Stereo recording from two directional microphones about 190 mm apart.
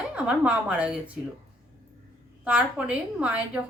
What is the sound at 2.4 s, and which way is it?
Speech, 5° right (ahead or behind).